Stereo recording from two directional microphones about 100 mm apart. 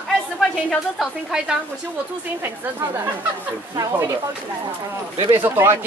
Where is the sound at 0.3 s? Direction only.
Centre (ahead or behind).